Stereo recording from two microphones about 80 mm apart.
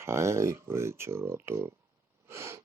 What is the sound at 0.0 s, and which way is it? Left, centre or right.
Speech, right.